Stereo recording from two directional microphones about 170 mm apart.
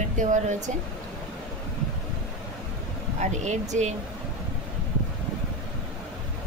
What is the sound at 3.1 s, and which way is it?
Speech, 45° right (ahead or behind).